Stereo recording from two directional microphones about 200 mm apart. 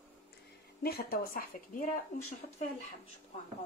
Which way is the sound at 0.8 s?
50° left (ahead or behind).